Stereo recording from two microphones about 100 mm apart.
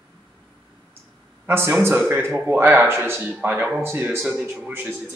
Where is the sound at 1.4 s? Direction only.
20° right (ahead or behind).